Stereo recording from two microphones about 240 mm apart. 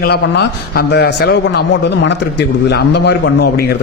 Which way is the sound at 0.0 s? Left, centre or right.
Left.